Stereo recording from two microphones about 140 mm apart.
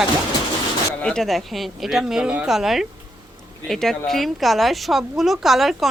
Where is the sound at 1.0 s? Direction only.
5° left (ahead or behind).